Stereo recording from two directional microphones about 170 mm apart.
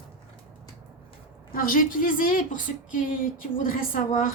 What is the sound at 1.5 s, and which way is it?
A woman's voice, 55° left (ahead or behind).